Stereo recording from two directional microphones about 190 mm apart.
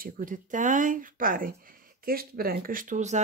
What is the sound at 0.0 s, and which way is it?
Speech, 45° right (ahead or behind).